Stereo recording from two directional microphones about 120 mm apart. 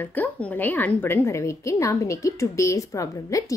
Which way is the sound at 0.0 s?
15° left (ahead or behind).